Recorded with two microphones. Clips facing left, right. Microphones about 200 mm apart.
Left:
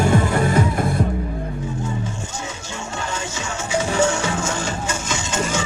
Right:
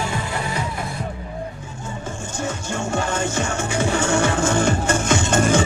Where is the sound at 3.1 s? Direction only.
55° right (ahead or behind).